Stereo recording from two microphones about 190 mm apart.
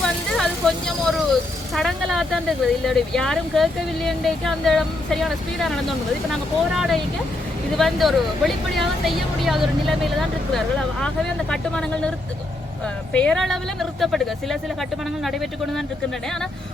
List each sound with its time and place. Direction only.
0.0 s vehicle: 5° left (ahead or behind)
1.7 s speech: centre (ahead or behind)
13.1 s speech: 5° left (ahead or behind)